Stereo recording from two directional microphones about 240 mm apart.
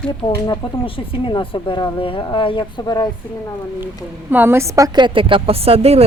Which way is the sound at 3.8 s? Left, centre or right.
Centre.